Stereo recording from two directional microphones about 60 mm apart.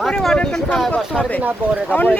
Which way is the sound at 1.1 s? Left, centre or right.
Centre.